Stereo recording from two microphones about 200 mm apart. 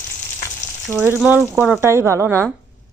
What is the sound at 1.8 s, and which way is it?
Speech, 15° right (ahead or behind).